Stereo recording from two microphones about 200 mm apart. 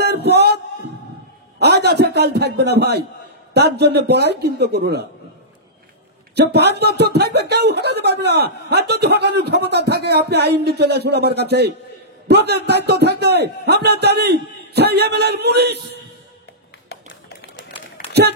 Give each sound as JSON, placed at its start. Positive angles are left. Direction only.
{"t": 0.0, "sound": "music", "side_deg": -55}
{"t": 1.6, "sound": "a man's voice", "side_deg": -55}
{"t": 6.3, "sound": "speech", "side_deg": -55}
{"t": 16.9, "sound": "typewriter", "side_deg": 60}